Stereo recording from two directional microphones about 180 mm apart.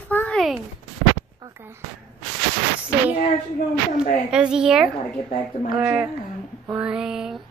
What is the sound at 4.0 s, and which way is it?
A woman's voice, 5° right (ahead or behind).